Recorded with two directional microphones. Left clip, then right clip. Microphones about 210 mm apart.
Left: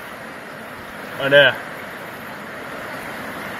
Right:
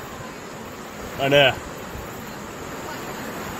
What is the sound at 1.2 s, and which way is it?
Speech, 35° right (ahead or behind).